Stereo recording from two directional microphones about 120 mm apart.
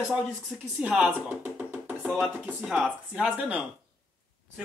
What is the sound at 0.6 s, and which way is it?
Speech, 15° right (ahead or behind).